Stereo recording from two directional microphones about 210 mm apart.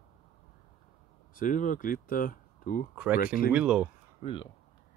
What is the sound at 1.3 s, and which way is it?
Speech, 40° left (ahead or behind).